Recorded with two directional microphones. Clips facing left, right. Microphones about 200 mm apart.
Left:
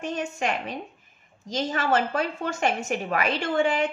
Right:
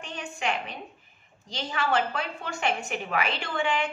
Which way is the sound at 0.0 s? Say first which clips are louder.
Left 5 dB; 40° left (ahead or behind).